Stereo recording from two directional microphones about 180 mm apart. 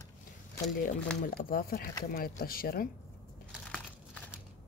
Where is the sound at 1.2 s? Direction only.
55° left (ahead or behind).